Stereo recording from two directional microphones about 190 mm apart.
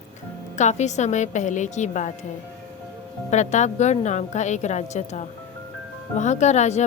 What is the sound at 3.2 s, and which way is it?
A woman's voice, 40° left (ahead or behind).